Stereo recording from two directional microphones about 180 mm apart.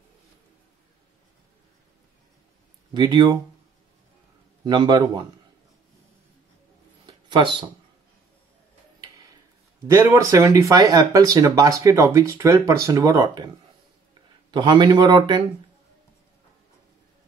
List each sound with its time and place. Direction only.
2.9 s a man's voice: 25° right (ahead or behind)
4.6 s a man's voice: 25° right (ahead or behind)
7.1 s a sound: 25° right (ahead or behind)
9.9 s speech: 15° right (ahead or behind)
14.5 s a man's voice: 25° right (ahead or behind)